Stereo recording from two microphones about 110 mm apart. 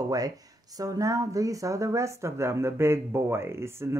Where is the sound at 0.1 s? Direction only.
35° right (ahead or behind).